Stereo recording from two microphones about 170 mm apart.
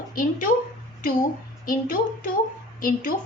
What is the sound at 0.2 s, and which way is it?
Speech, 55° left (ahead or behind).